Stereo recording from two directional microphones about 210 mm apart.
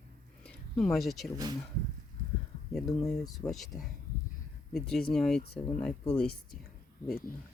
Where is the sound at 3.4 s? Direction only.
Centre (ahead or behind).